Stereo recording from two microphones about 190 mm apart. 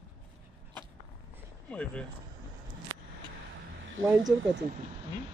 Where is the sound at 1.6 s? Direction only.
5° left (ahead or behind).